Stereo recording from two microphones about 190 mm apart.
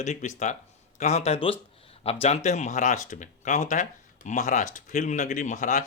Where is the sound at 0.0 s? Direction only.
40° left (ahead or behind).